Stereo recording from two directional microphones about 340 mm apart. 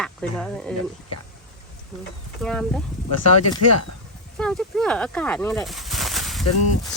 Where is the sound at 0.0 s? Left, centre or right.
Centre.